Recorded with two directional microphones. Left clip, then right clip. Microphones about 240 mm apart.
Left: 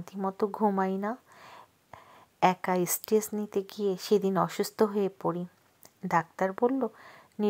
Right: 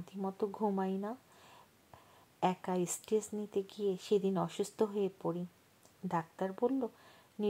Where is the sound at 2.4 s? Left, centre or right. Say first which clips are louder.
Left 9 dB; left.